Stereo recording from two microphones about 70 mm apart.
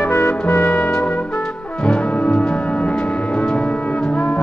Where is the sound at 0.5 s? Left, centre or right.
Left.